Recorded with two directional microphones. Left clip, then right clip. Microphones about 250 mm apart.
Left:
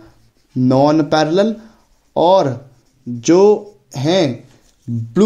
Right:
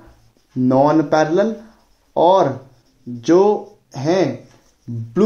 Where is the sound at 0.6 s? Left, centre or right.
Left.